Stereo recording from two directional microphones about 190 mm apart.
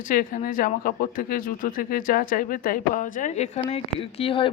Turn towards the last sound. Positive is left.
turn(degrees=30)  # may be behind; listen again after turning